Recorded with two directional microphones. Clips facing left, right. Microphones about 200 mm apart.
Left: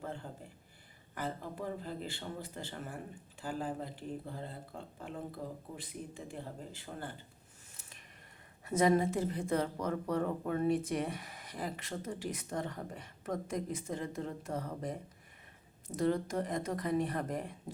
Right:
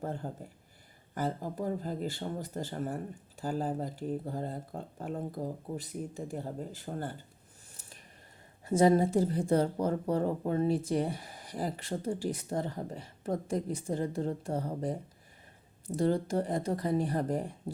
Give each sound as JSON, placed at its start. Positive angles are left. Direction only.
{"t": 0.0, "sound": "speech", "side_deg": -45}
{"t": 7.7, "sound": "a sound", "side_deg": -35}
{"t": 8.6, "sound": "speech", "side_deg": -30}
{"t": 16.0, "sound": "speech", "side_deg": -30}